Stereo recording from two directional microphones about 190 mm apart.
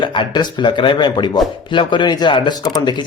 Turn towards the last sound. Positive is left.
turn(degrees=25)  # may be behind; listen again after turning